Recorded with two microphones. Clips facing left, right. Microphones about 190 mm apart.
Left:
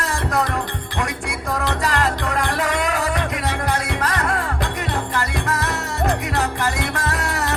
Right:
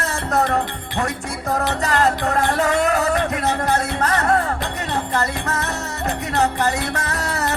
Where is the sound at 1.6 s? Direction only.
40° right (ahead or behind).